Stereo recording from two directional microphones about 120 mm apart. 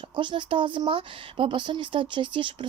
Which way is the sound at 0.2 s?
40° right (ahead or behind).